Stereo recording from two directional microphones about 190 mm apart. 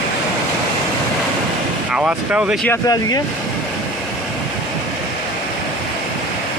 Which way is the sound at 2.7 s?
20° left (ahead or behind).